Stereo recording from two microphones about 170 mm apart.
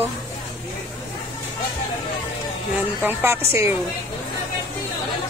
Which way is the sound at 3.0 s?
15° right (ahead or behind).